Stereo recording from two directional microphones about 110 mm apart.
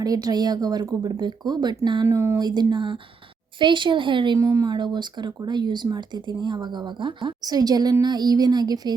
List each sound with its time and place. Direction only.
0.0 s speech: 35° right (ahead or behind)
2.0 s speech: 25° right (ahead or behind)
2.4 s speech: 40° right (ahead or behind)
4.4 s speech: 30° right (ahead or behind)